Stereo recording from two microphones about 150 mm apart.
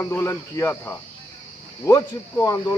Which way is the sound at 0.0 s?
20° left (ahead or behind).